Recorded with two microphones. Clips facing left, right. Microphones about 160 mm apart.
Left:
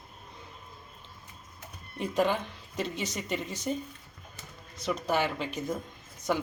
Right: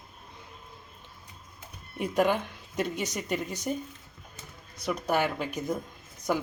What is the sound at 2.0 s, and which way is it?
Speech, 10° right (ahead or behind).